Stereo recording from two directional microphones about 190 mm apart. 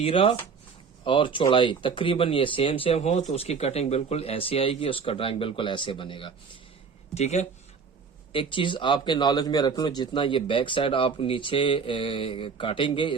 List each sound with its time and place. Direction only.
0.0 s speech: 30° left (ahead or behind)